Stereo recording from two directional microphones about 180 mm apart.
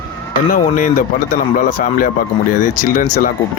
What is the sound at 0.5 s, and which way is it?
Speech, 50° left (ahead or behind).